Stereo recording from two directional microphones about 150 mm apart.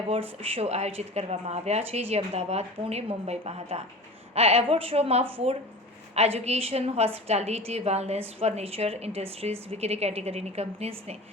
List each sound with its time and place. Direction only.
0.1 s a woman's voice: 40° right (ahead or behind)